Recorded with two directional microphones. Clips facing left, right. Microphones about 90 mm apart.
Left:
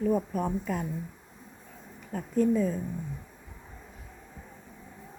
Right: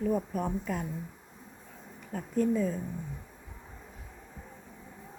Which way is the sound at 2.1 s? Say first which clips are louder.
Left 3 dB; 5° left (ahead or behind).